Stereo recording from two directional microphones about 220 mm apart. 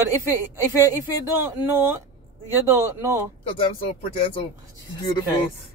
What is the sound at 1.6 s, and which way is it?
Speech, 10° right (ahead or behind).